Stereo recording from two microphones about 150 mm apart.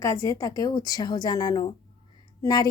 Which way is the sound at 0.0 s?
20° left (ahead or behind).